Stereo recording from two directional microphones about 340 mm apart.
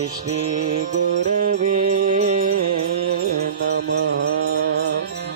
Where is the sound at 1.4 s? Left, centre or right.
Right.